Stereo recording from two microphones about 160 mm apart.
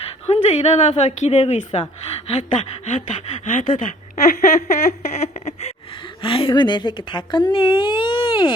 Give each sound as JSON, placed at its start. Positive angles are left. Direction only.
{"t": 0.4, "sound": "speech", "side_deg": 40}